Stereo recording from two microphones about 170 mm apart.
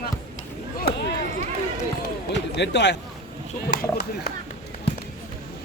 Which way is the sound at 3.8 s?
70° left (ahead or behind).